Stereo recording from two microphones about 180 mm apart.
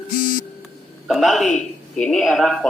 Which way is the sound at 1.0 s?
Centre (ahead or behind).